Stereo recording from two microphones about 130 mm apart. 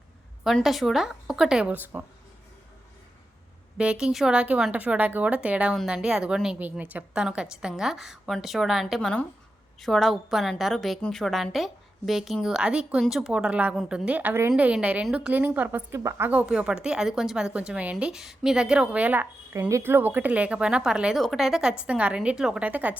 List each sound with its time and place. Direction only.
0.4 s a woman's voice: centre (ahead or behind)
3.8 s a woman's voice: 5° right (ahead or behind)
19.5 s speech: 25° right (ahead or behind)